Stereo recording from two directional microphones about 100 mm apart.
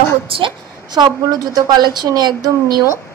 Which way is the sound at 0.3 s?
50° right (ahead or behind).